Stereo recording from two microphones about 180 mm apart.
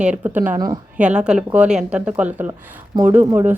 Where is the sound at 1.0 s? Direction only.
5° right (ahead or behind).